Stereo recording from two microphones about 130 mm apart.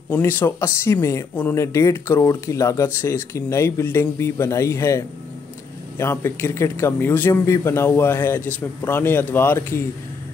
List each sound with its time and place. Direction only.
0.1 s speech: 15° left (ahead or behind)